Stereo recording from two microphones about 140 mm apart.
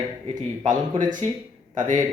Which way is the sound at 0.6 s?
60° right (ahead or behind).